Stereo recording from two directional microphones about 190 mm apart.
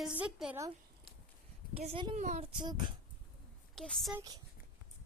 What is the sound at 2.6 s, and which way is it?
Speech, 25° right (ahead or behind).